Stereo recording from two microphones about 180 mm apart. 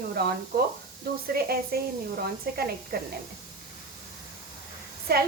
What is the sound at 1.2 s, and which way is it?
A woman's voice, 60° right (ahead or behind).